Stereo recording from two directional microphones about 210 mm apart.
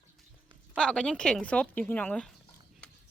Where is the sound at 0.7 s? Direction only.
5° left (ahead or behind).